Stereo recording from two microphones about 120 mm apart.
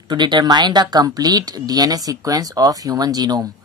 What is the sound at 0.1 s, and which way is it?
Speech, 40° right (ahead or behind).